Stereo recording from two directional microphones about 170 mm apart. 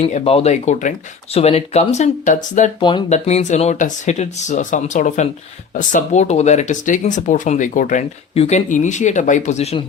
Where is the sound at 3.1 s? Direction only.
40° left (ahead or behind).